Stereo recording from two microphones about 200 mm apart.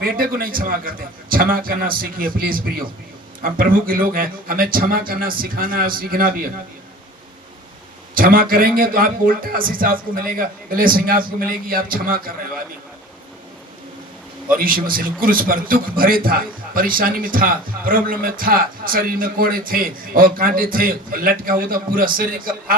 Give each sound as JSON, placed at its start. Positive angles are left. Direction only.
{"t": 0.0, "sound": "a man's voice", "side_deg": -45}
{"t": 8.1, "sound": "a man's voice", "side_deg": -45}
{"t": 14.6, "sound": "a man's voice", "side_deg": -45}